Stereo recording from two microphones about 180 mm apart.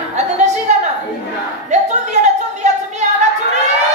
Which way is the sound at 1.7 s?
40° right (ahead or behind).